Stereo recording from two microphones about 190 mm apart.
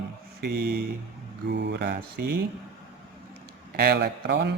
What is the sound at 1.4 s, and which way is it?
Speech, 65° right (ahead or behind).